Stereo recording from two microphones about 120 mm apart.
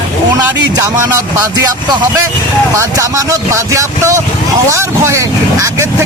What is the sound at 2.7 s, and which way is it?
Speech, 25° right (ahead or behind).